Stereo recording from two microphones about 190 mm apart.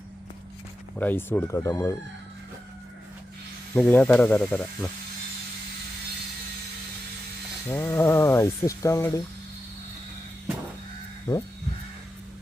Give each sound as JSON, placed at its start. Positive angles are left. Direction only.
{"t": 0.9, "sound": "speech", "side_deg": 10}
{"t": 3.8, "sound": "speech", "side_deg": 10}
{"t": 7.7, "sound": "speech", "side_deg": 10}
{"t": 11.3, "sound": "speech", "side_deg": 20}